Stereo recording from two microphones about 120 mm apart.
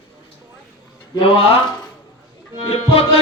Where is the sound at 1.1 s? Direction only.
45° left (ahead or behind).